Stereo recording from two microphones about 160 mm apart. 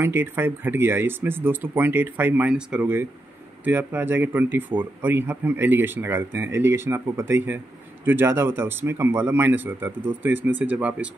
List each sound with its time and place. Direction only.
0.0 s speech: 15° right (ahead or behind)